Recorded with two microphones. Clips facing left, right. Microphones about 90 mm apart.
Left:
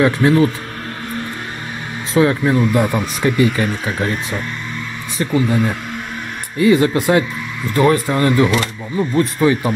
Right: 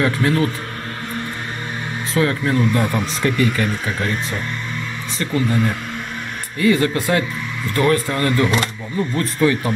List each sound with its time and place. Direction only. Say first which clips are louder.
0.0 s speech: left 5 dB; 20° left (ahead or behind)
2.1 s speech: left 4 dB; 20° left (ahead or behind)